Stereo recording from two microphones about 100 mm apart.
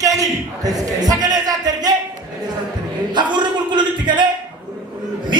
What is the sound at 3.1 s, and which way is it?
Speech, 50° right (ahead or behind).